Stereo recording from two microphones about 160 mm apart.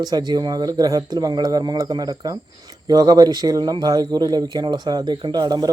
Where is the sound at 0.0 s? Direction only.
25° right (ahead or behind).